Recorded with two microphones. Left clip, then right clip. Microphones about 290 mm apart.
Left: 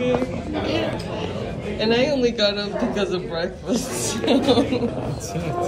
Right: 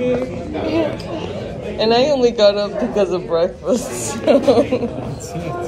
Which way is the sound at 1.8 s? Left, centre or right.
Centre.